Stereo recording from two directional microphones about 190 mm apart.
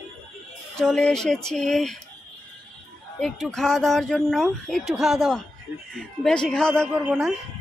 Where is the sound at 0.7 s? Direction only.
5° left (ahead or behind).